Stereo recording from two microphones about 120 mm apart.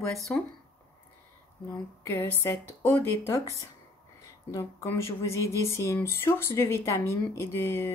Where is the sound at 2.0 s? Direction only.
20° left (ahead or behind).